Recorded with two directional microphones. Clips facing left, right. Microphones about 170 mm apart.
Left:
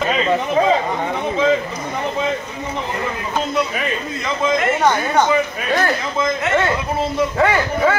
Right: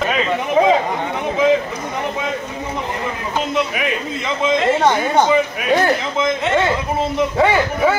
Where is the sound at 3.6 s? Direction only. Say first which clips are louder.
Right 1 dB; 10° right (ahead or behind).